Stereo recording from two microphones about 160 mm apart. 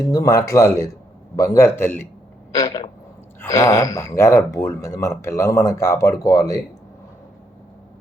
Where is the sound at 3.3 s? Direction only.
20° left (ahead or behind).